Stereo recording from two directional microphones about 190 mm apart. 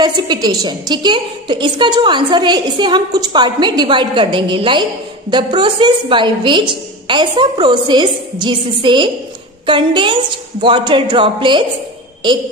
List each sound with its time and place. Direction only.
0.0 s a woman's voice: 20° right (ahead or behind)